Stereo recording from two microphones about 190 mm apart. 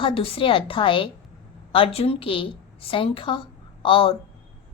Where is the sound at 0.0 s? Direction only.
30° left (ahead or behind).